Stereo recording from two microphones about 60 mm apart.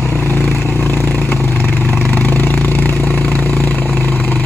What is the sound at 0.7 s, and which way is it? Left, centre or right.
Vehicle, left.